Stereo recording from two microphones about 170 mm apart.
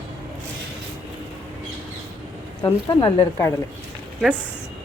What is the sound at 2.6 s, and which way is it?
Speech, 20° left (ahead or behind).